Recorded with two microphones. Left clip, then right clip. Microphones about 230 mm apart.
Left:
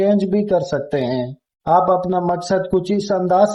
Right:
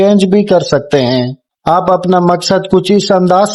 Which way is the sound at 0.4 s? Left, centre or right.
Right.